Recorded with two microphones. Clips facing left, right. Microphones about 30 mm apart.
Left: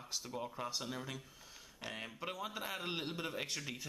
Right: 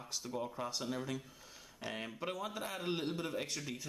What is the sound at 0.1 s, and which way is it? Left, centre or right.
Speech, centre.